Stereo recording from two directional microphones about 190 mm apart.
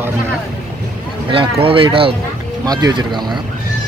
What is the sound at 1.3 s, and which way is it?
Speech, 30° right (ahead or behind).